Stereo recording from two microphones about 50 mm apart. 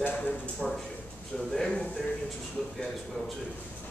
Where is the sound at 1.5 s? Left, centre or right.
Centre.